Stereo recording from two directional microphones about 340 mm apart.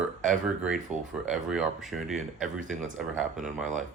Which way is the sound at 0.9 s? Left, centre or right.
Right.